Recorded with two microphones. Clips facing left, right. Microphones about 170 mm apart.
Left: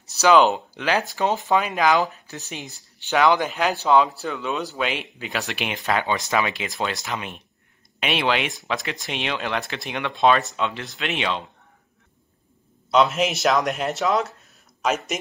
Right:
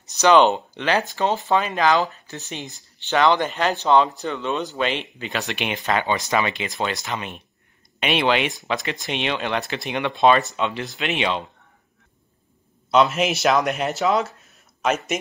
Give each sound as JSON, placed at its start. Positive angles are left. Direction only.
{"t": 0.2, "sound": "speech", "side_deg": 0}
{"t": 12.9, "sound": "speech", "side_deg": 0}